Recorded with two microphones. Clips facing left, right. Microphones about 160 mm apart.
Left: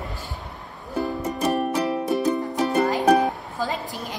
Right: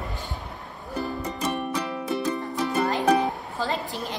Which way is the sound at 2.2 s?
15° left (ahead or behind).